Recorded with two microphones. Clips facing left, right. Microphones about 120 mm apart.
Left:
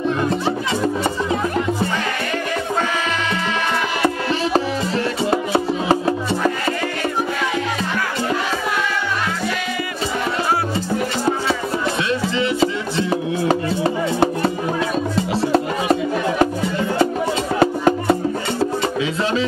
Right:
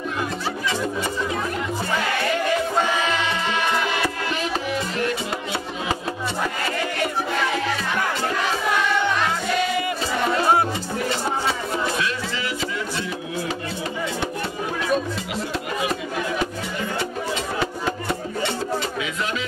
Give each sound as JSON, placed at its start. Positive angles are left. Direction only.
{"t": 5.3, "sound": "music", "side_deg": 35}
{"t": 12.4, "sound": "music", "side_deg": 25}
{"t": 13.1, "sound": "music", "side_deg": 45}
{"t": 17.6, "sound": "music", "side_deg": 50}